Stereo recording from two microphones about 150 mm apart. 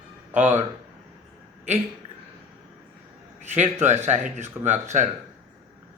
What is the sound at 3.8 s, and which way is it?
Speech, 50° right (ahead or behind).